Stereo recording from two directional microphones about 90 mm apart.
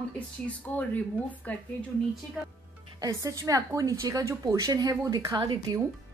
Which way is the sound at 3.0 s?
40° right (ahead or behind).